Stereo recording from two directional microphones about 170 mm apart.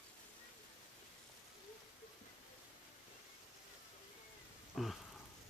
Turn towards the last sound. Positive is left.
turn(degrees=0)  # may be behind; listen again after turning